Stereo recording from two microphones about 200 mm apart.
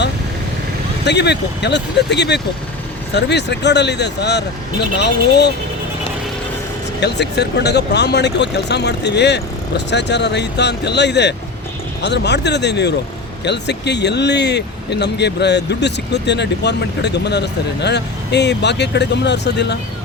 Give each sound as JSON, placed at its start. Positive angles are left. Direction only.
{"t": 1.0, "sound": "speech", "side_deg": 60}
{"t": 7.0, "sound": "speech", "side_deg": 55}